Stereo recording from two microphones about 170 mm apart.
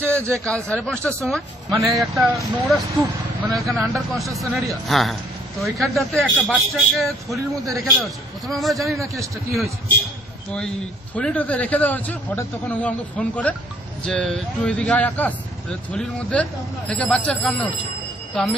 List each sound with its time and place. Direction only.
0.2 s a man's voice: 15° right (ahead or behind)
0.5 s a man's voice: 5° left (ahead or behind)
7.3 s speech: 20° right (ahead or behind)
7.8 s speech: centre (ahead or behind)
9.0 s a man's voice: 20° right (ahead or behind)
11.1 s a man's voice: 10° left (ahead or behind)